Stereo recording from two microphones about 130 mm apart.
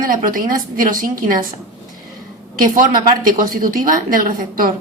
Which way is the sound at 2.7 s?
90° right.